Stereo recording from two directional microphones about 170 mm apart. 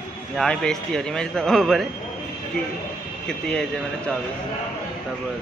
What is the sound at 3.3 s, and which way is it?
Speech, 5° left (ahead or behind).